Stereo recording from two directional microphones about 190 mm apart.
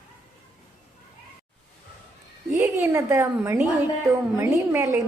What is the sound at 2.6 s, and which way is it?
A woman's voice, 15° right (ahead or behind).